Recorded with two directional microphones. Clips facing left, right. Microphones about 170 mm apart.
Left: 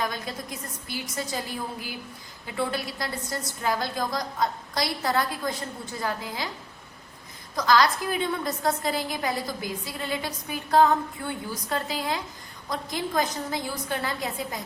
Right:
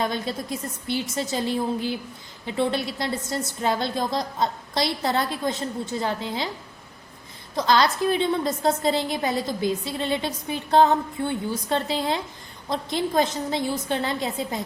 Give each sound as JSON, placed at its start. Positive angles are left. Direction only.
{"t": 0.0, "sound": "a woman's voice", "side_deg": -25}
{"t": 7.5, "sound": "a woman's voice", "side_deg": -25}